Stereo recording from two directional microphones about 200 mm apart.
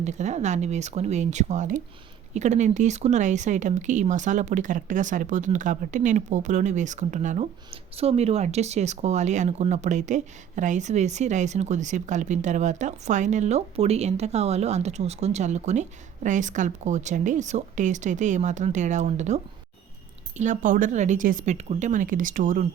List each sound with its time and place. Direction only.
0.0 s speech: 35° right (ahead or behind)